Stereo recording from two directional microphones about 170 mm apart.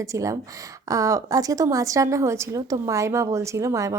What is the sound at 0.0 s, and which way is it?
A woman's voice, 20° right (ahead or behind).